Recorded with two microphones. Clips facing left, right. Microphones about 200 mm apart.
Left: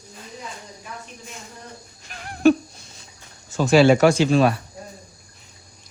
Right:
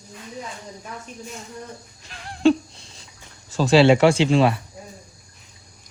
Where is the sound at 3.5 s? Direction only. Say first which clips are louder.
Even; 30° right (ahead or behind).